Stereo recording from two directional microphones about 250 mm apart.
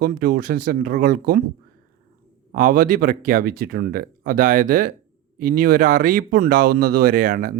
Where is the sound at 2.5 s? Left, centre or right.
Right.